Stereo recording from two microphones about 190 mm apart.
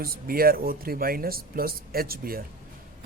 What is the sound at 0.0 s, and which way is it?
A man's voice, 50° right (ahead or behind).